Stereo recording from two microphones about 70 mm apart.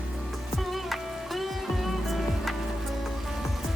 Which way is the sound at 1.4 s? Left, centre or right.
Centre.